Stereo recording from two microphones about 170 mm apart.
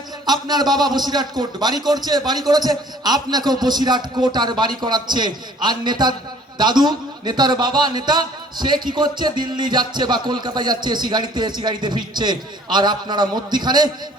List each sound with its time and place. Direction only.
0.3 s a man's voice: 25° right (ahead or behind)